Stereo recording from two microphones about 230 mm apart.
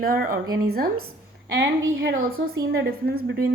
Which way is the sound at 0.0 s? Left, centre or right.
Right.